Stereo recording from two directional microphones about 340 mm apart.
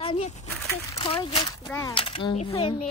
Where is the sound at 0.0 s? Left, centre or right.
Centre.